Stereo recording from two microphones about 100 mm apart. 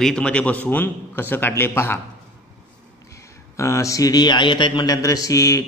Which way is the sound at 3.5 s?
30° left (ahead or behind).